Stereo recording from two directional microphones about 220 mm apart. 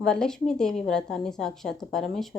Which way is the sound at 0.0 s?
5° left (ahead or behind).